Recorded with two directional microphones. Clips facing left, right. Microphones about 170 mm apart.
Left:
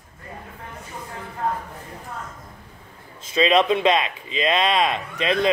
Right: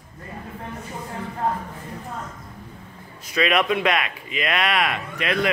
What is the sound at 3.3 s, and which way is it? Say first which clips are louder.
A man's voice: left 3 dB; 25° left (ahead or behind).